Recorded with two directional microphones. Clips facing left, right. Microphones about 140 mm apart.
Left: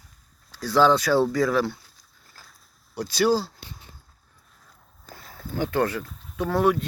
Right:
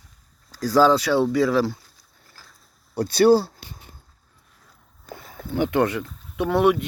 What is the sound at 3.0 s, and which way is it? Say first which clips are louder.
Speech: right 6 dB; 55° right (ahead or behind).